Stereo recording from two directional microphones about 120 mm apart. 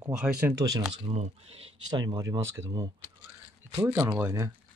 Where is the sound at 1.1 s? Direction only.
65° right (ahead or behind).